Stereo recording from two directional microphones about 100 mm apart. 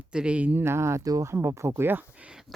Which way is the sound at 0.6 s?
25° right (ahead or behind).